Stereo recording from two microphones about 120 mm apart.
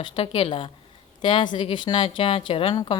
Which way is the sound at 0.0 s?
45° left (ahead or behind).